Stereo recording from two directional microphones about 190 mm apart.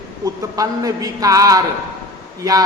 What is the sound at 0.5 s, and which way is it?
A man's voice, 20° right (ahead or behind).